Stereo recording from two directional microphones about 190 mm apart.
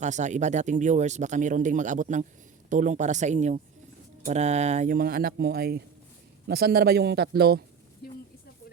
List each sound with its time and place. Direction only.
0.0 s speech: 40° right (ahead or behind); by 7.6 s 55° right (ahead or behind)